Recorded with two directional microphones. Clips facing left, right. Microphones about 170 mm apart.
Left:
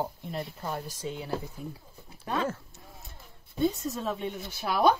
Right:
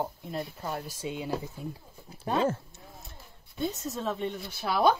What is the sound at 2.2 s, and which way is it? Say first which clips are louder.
Speech: right 3 dB; 30° right (ahead or behind).